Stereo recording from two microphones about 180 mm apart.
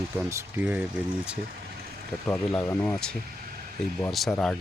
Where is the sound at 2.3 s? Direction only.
10° left (ahead or behind).